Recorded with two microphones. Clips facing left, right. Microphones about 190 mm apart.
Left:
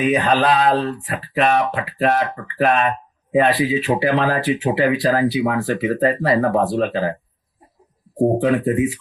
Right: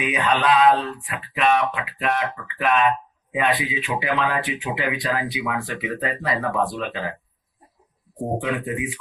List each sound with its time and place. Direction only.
0.0 s speech: 35° left (ahead or behind)
8.2 s speech: 35° left (ahead or behind)